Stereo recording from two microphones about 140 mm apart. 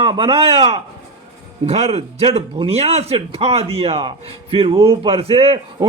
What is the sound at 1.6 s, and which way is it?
A man's voice, 50° right (ahead or behind).